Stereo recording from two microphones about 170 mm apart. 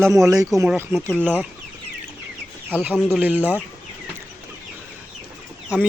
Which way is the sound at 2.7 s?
10° right (ahead or behind).